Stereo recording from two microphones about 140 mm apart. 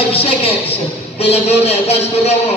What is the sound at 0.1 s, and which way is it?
A woman's voice, 45° left (ahead or behind).